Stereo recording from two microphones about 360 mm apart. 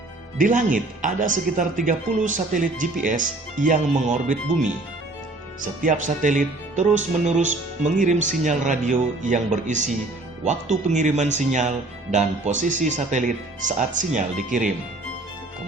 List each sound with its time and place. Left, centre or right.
0.3 s speech: right